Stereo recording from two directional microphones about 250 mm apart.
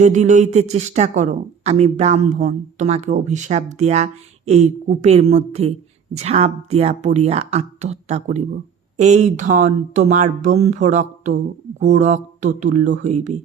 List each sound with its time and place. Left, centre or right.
0.0 s speech: right